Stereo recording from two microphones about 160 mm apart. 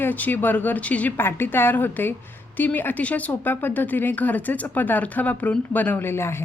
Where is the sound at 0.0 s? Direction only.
10° left (ahead or behind).